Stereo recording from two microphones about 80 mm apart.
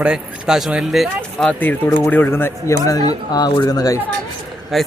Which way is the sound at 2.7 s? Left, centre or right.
Left.